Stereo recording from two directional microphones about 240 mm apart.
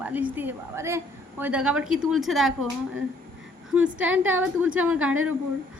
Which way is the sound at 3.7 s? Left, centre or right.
Centre.